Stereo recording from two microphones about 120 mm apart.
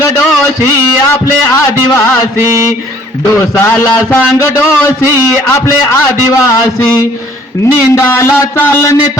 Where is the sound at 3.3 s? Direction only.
25° left (ahead or behind).